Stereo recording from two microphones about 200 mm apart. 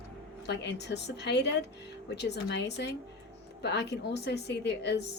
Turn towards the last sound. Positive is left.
turn(degrees=55)  # may be behind; listen again after turning